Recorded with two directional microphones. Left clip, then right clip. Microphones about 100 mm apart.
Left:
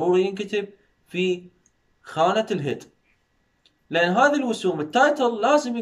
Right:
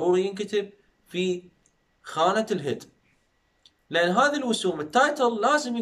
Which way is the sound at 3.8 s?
15° left (ahead or behind).